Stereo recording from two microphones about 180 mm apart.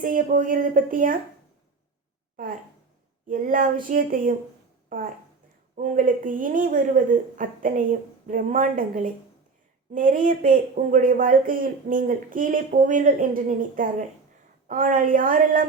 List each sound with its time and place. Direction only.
0.0 s speech: 50° right (ahead or behind)
3.2 s speech: 50° right (ahead or behind)